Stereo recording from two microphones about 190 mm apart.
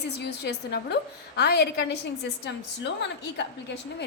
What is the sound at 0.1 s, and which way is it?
A woman's voice, 60° left (ahead or behind).